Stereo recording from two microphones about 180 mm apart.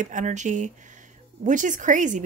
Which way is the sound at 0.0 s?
45° right (ahead or behind).